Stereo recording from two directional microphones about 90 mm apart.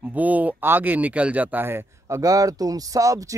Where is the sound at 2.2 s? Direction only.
40° right (ahead or behind).